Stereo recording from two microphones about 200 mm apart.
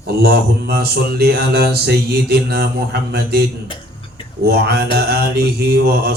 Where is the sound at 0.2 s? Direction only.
50° right (ahead or behind).